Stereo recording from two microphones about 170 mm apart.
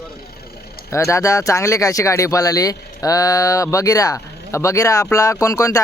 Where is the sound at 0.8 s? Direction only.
15° left (ahead or behind).